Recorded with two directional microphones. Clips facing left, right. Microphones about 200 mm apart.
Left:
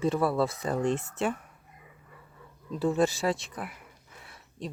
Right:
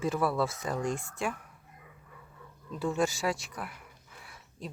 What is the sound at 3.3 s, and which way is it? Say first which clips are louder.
Speech: left 3 dB; 30° left (ahead or behind).